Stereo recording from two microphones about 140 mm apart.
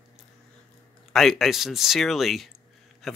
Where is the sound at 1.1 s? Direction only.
Centre (ahead or behind).